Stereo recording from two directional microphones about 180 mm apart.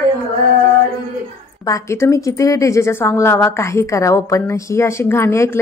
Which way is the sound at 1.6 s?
20° left (ahead or behind).